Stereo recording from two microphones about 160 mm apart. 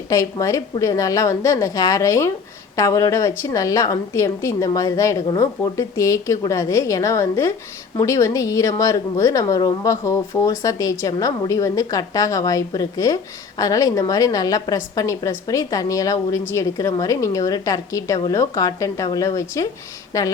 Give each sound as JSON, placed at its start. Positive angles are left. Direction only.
{"t": 0.1, "sound": "a woman's voice", "side_deg": 20}